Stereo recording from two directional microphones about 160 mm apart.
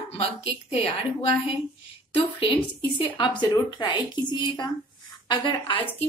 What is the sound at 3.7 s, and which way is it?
Speech, 30° left (ahead or behind).